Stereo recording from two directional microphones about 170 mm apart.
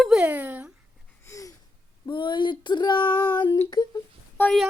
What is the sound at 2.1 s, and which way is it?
Female singing, 30° left (ahead or behind).